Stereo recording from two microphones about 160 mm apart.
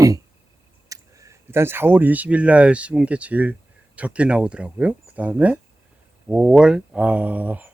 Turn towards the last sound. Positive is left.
turn(degrees=-10)  # may be behind; listen again after turning